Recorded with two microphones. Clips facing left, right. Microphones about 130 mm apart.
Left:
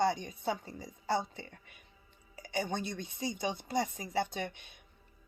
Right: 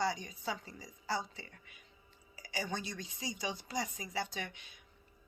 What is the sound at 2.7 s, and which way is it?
A woman's voice, 55° left (ahead or behind).